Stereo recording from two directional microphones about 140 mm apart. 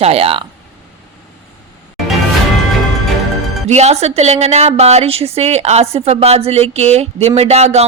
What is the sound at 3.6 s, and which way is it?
Speech, 50° right (ahead or behind).